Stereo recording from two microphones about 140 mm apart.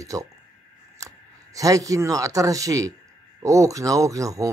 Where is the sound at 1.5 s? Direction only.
25° right (ahead or behind).